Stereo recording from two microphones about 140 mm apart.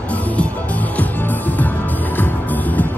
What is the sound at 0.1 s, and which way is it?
Music, 10° left (ahead or behind).